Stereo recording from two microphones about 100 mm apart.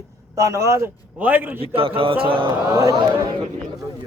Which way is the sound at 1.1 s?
15° right (ahead or behind).